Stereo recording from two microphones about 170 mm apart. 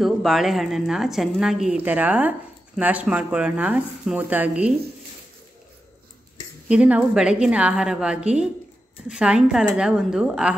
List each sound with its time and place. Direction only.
0.0 s a woman's voice: centre (ahead or behind)
6.7 s a woman's voice: 5° right (ahead or behind)